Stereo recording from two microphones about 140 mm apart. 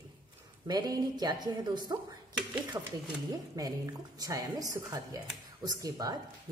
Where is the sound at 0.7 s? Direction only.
30° right (ahead or behind).